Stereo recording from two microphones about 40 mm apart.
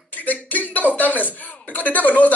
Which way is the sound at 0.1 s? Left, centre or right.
Left.